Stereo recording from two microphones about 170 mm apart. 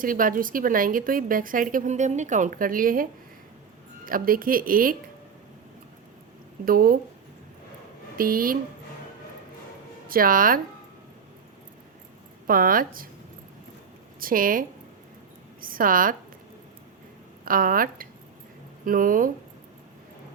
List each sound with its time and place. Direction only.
0.0 s a woman's voice: 55° right (ahead or behind)
6.7 s speech: 55° right (ahead or behind)
8.2 s speech: 55° right (ahead or behind)
10.1 s speech: 55° right (ahead or behind)
12.5 s speech: 55° right (ahead or behind)
14.2 s a woman's voice: 55° right (ahead or behind)
15.6 s a woman's voice: 55° right (ahead or behind)
17.4 s a woman's voice: 55° right (ahead or behind)